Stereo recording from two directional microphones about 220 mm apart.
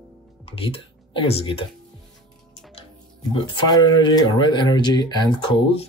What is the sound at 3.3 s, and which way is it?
Speech, 20° left (ahead or behind).